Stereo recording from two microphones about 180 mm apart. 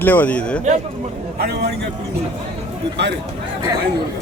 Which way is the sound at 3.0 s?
70° right (ahead or behind).